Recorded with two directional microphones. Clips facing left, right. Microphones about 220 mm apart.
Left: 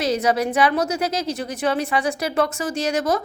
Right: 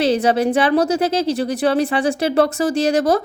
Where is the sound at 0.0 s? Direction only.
30° right (ahead or behind).